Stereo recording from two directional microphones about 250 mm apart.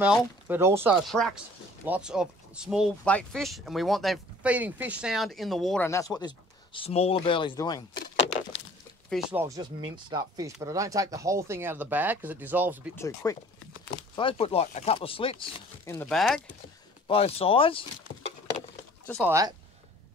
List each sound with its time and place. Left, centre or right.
0.0 s speech: centre
1.0 s speech: centre
9.1 s speech: centre
12.9 s speech: centre
15.8 s speech: centre
17.1 s speech: left
19.2 s speech: centre